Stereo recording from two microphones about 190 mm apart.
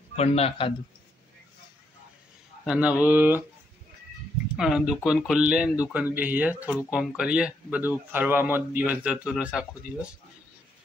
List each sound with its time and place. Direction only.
0.1 s a man's voice: 35° left (ahead or behind)
2.6 s speech: 5° right (ahead or behind)
4.6 s a man's voice: 5° right (ahead or behind)